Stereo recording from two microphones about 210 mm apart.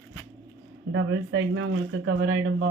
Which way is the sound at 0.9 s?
60° right (ahead or behind).